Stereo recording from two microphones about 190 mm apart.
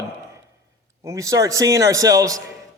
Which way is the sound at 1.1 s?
15° right (ahead or behind).